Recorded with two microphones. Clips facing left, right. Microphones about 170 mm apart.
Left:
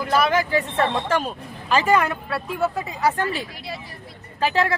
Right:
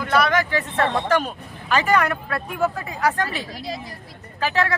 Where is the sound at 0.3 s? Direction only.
30° left (ahead or behind).